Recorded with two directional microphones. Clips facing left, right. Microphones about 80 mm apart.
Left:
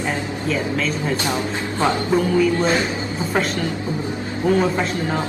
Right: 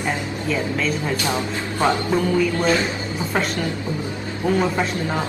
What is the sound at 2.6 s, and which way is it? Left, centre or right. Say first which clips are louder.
Speech: even; left.